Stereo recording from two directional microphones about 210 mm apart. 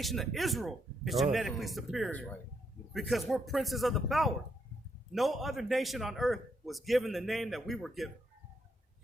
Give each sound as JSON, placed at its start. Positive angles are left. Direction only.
{"t": 0.0, "sound": "a man's voice", "side_deg": 0}